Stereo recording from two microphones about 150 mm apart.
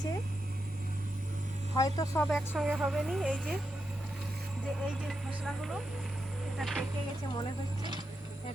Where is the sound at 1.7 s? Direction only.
25° left (ahead or behind).